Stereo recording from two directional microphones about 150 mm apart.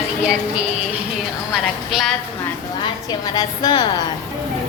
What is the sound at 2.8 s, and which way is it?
A woman's voice, 25° left (ahead or behind).